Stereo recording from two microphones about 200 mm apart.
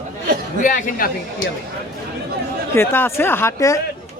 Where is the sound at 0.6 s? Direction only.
40° left (ahead or behind).